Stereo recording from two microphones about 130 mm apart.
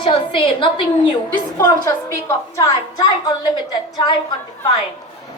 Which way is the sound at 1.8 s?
25° left (ahead or behind).